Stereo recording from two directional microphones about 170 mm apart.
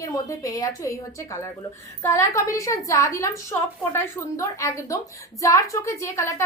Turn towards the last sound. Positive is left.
turn(degrees=15)  # may be behind; listen again after turning